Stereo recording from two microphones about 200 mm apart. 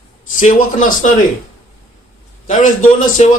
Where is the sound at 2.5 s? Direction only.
40° left (ahead or behind).